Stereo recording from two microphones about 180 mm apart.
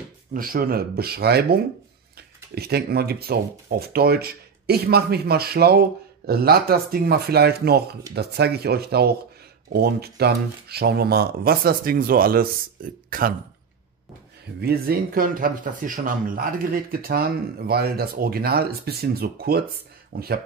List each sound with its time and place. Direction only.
0.3 s speech: 55° right (ahead or behind)
14.6 s speech: 60° right (ahead or behind)